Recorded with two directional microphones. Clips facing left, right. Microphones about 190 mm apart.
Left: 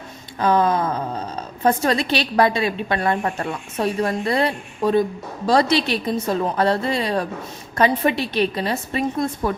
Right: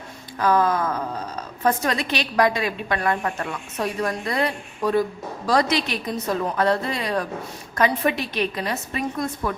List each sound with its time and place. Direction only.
0.3 s a woman's voice: 25° left (ahead or behind)